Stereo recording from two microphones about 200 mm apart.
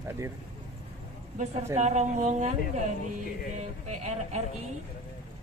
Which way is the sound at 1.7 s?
35° right (ahead or behind).